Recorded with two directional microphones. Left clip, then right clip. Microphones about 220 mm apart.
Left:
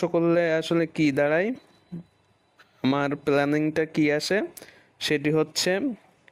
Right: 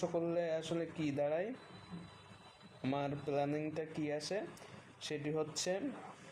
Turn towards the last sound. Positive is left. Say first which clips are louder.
# left 14 dB
turn(degrees=45)  # may be behind; listen again after turning